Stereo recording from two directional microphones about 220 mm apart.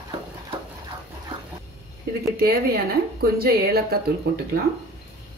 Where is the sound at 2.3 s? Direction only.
45° right (ahead or behind).